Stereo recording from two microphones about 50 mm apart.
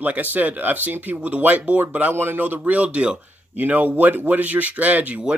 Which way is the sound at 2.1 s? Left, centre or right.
Right.